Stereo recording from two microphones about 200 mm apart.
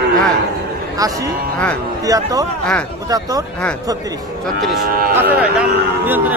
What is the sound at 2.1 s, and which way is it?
Speech, 15° right (ahead or behind).